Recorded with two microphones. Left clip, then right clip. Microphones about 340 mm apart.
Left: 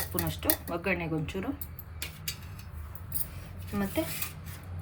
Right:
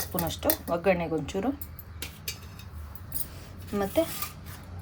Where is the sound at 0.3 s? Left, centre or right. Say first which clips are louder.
Right 7 dB; right.